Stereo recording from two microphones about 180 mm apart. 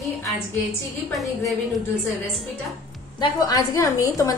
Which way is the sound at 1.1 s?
Centre (ahead or behind).